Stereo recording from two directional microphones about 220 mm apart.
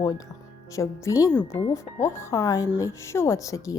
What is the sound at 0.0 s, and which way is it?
Speech, 15° left (ahead or behind).